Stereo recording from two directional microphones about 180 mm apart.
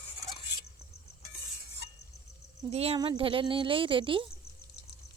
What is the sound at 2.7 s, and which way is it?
Speech, 35° right (ahead or behind).